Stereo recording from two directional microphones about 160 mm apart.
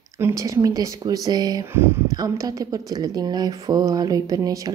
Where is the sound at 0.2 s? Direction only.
20° right (ahead or behind).